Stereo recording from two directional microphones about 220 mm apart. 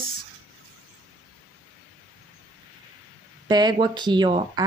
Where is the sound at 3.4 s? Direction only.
20° right (ahead or behind).